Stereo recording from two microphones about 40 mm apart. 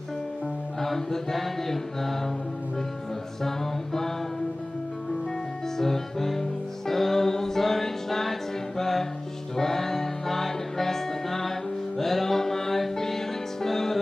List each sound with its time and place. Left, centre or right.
0.7 s mantra: centre
3.4 s mantra: centre
5.8 s mantra: centre
6.9 s music: centre